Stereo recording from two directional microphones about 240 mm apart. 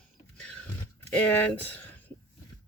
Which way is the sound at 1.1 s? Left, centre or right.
Centre.